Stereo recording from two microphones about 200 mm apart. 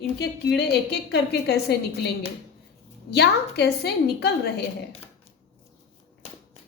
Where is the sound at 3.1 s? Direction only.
55° left (ahead or behind).